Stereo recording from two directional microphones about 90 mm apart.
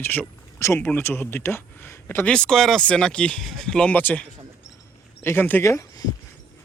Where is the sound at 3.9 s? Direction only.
20° left (ahead or behind); by 6.0 s 35° left (ahead or behind).